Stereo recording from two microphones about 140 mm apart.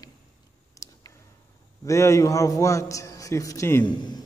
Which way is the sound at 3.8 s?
30° left (ahead or behind).